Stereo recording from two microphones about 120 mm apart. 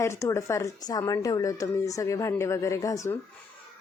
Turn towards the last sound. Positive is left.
turn(degrees=25)  # may be behind; listen again after turning